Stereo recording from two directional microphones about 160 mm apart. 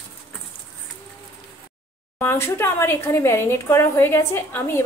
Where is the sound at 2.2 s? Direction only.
15° left (ahead or behind).